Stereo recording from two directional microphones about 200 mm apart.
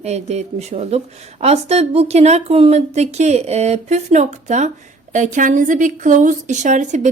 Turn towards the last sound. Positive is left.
turn(degrees=-35)  # may be behind; listen again after turning